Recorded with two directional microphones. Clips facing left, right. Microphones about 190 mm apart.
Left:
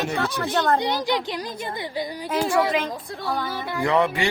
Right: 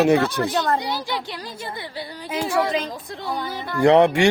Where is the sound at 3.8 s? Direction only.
75° right (ahead or behind).